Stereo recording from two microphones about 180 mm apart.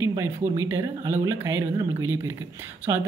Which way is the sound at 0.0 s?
15° right (ahead or behind).